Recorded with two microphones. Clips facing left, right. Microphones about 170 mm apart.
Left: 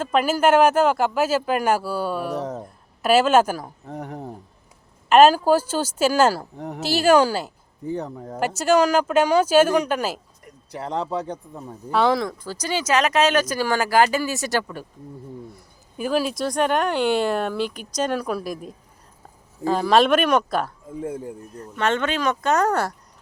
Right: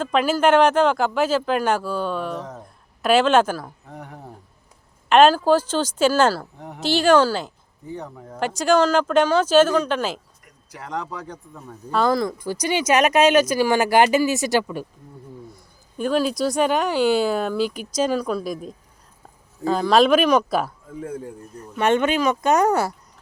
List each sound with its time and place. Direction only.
0.0 s speech: 5° left (ahead or behind)
5.0 s speech: 5° left (ahead or behind)
10.4 s speech: 30° left (ahead or behind)
11.9 s speech: 5° left (ahead or behind)
12.4 s speech: 15° right (ahead or behind)
15.5 s speech: 5° left (ahead or behind)
21.8 s speech: 15° right (ahead or behind)